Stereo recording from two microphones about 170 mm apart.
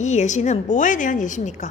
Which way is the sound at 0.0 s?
45° left (ahead or behind).